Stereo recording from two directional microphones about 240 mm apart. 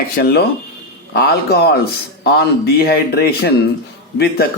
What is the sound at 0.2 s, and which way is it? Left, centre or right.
Speech, left.